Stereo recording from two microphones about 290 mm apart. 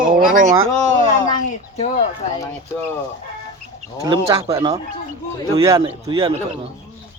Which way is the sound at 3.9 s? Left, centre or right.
Centre.